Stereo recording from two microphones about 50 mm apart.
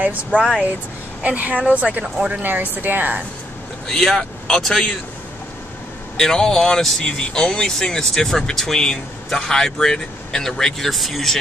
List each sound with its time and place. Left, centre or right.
0.0 s speech: right
3.8 s speech: centre
6.1 s speech: centre